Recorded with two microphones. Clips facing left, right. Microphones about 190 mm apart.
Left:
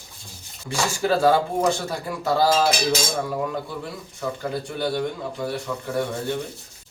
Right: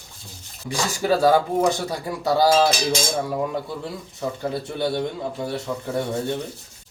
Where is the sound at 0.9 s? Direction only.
15° right (ahead or behind).